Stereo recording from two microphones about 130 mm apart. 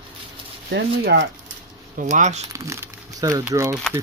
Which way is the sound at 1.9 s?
65° right (ahead or behind).